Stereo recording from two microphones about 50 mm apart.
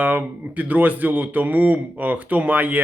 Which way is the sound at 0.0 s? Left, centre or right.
Right.